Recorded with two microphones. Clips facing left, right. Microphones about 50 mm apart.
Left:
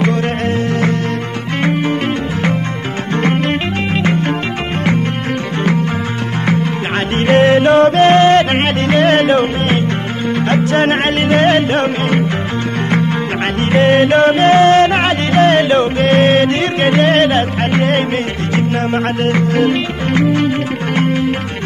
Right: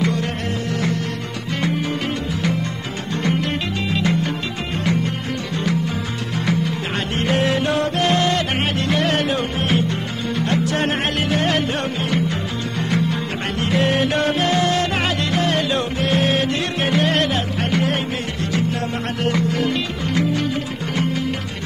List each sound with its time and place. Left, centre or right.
0.0 s music: left
1.6 s music: left
3.2 s music: left
6.4 s music: left
13.6 s music: left